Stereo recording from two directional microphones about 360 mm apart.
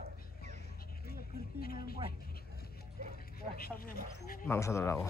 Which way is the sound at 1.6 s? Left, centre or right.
Left.